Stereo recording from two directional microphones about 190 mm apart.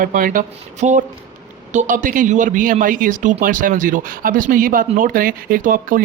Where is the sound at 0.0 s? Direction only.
45° right (ahead or behind).